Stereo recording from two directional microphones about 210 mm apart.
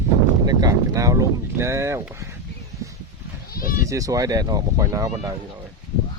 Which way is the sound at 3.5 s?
45° left (ahead or behind).